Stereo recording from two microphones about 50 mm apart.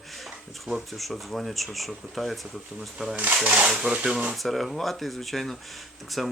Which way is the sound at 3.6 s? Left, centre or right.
Centre.